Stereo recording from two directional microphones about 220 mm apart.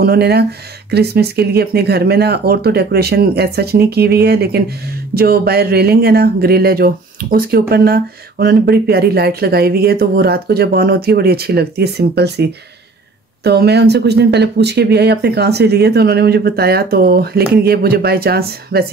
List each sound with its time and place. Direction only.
0.0 s speech: 45° right (ahead or behind)